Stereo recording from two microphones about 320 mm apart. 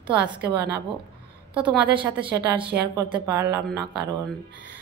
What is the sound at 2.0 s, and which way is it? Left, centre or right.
Speech, centre.